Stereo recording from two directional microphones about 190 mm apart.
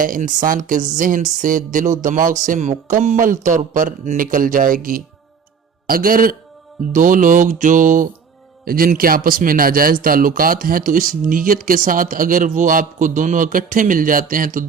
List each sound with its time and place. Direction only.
0.0 s speech: 45° right (ahead or behind)